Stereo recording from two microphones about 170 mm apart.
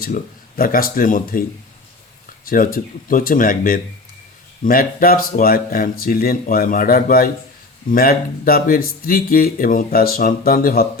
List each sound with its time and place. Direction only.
0.0 s speech: 55° left (ahead or behind)
2.5 s speech: 55° left (ahead or behind)